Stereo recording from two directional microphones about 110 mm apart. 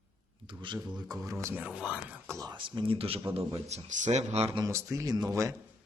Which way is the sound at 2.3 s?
30° right (ahead or behind).